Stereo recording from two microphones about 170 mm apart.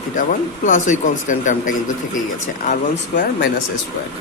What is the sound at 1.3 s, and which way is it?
Speech, 50° left (ahead or behind).